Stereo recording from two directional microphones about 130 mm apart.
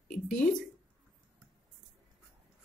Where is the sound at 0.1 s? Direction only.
90° left.